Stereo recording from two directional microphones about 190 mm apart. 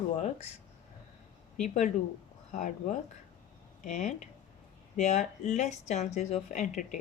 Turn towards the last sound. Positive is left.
turn(degrees=40)  # may be behind; listen again after turning